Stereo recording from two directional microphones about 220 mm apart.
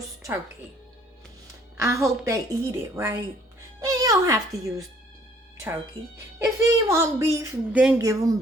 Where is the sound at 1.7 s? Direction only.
15° right (ahead or behind).